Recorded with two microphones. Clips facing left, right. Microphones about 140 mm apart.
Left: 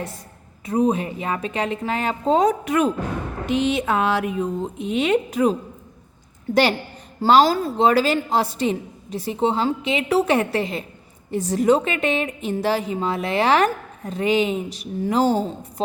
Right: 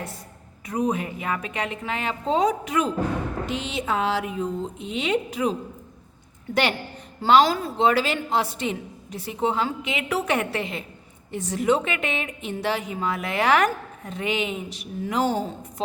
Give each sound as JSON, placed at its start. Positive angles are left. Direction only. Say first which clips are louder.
{"t": 0.6, "sound": "a woman's voice", "louder": "left 5 dB", "side_deg": 30}
{"t": 6.5, "sound": "a woman's voice", "louder": "left 5 dB", "side_deg": 35}